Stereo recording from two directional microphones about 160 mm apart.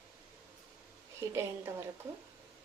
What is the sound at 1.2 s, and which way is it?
Speech, 15° right (ahead or behind).